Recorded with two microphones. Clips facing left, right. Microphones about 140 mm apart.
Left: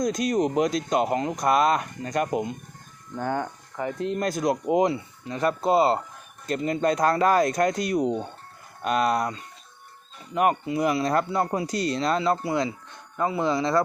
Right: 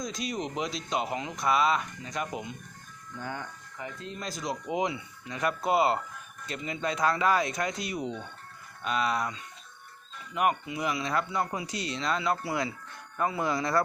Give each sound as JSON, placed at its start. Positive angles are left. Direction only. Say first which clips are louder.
{"t": 0.0, "sound": "speech", "louder": "left 10 dB", "side_deg": 50}
{"t": 6.4, "sound": "speech", "louder": "left 9 dB", "side_deg": 45}